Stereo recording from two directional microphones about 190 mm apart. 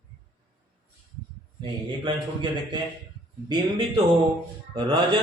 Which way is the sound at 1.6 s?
25° right (ahead or behind).